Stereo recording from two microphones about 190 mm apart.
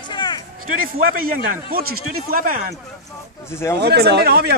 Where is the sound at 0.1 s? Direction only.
20° left (ahead or behind).